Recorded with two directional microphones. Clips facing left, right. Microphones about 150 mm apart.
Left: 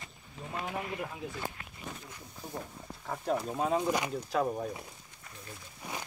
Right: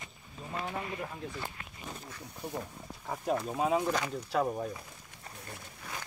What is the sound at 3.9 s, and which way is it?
Speech, 15° left (ahead or behind).